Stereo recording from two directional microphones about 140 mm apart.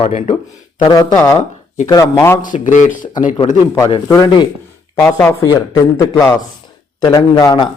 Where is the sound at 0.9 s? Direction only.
25° left (ahead or behind).